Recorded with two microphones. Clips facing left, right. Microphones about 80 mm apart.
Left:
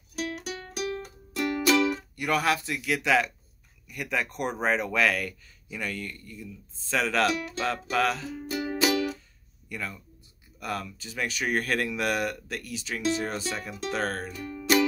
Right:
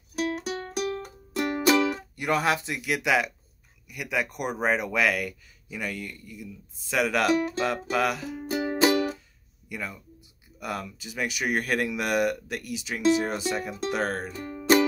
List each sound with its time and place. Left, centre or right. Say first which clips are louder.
0.2 s music: right 5 dB; right; by 3.3 s centre
3.9 s speech: right 1 dB; centre
8.5 s music: right 3 dB; right
9.7 s speech: right 1 dB; centre
14.3 s music: right 4 dB; right